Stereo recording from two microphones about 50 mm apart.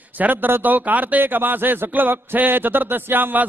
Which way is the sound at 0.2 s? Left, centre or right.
Right.